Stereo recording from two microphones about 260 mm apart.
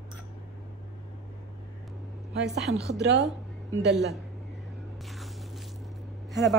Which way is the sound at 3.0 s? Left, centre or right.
Right.